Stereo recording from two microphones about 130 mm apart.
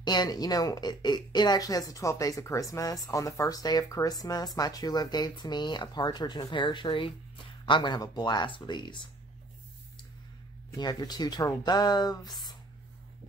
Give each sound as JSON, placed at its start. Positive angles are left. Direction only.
{"t": 0.0, "sound": "speech", "side_deg": 35}
{"t": 10.7, "sound": "speech", "side_deg": 30}